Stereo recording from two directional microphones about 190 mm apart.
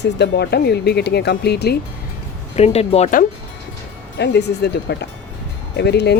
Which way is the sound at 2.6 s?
35° left (ahead or behind).